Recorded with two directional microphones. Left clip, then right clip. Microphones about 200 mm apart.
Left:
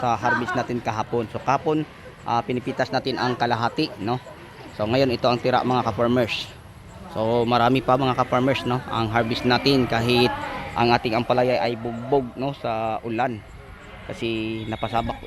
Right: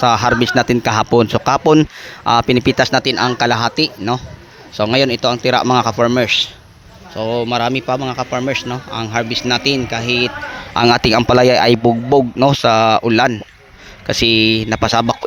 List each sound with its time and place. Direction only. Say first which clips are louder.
0.5 s speech: right 11 dB; 30° right (ahead or behind)
1.1 s a man's voice: right 9 dB; 45° right (ahead or behind)
2.7 s a man's voice: right 10 dB; 25° right (ahead or behind); by 10.3 s centre (ahead or behind)
10.8 s a man's voice: right 9 dB; 40° right (ahead or behind)